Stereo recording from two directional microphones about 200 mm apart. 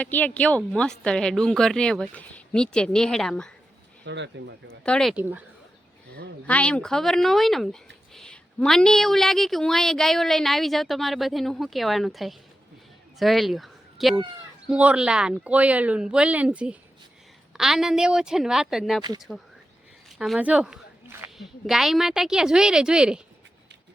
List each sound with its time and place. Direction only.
0.0 s a woman's voice: 10° left (ahead or behind)
4.0 s speech: 60° right (ahead or behind)
4.8 s a woman's voice: 5° left (ahead or behind)
6.4 s a woman's voice: 5° left (ahead or behind)
20.1 s a woman's voice: 5° right (ahead or behind)